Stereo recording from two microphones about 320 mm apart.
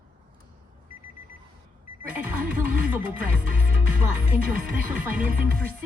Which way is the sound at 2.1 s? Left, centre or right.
Centre.